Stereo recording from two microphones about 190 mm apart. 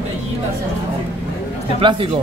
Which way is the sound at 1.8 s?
25° right (ahead or behind).